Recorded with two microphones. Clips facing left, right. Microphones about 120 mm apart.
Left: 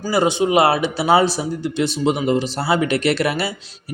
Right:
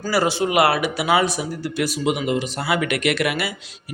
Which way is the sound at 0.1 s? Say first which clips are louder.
Left 3 dB; 20° left (ahead or behind).